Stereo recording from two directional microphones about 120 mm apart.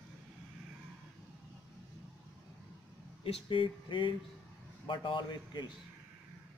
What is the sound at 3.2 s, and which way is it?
A man's voice, 50° left (ahead or behind).